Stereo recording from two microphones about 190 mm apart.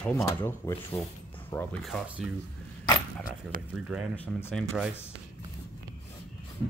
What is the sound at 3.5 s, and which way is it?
Speech, 45° right (ahead or behind).